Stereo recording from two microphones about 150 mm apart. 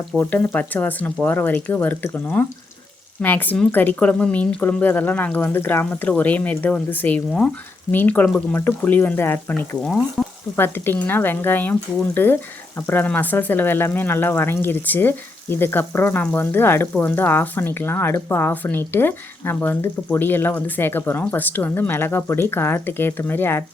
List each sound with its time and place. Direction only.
0.2 s speech: 10° left (ahead or behind)
10.2 s stir: 5° left (ahead or behind)
10.6 s speech: 15° left (ahead or behind)